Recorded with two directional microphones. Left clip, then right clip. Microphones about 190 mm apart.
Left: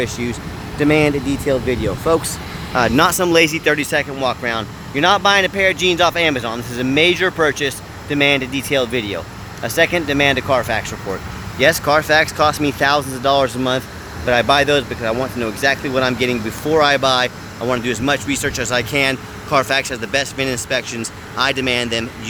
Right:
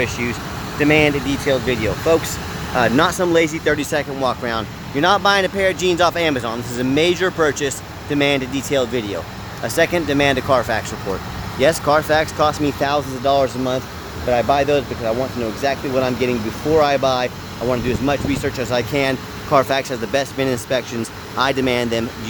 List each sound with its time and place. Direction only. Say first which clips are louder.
0.0 s speech: right 1 dB; 15° left (ahead or behind); by 22.0 s 15° right (ahead or behind)